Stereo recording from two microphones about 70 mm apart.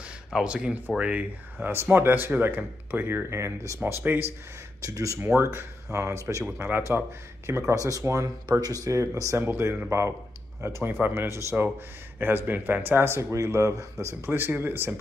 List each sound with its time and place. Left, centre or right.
0.0 s a sound: centre
0.8 s speech: centre
3.3 s speech: right
4.0 s speech: right
4.8 s speech: right
5.2 s speech: right
6.6 s speech: right
8.5 s speech: right
8.8 s speech: right
9.4 s speech: right
9.8 s speech: right
10.6 s speech: right
14.0 s speech: right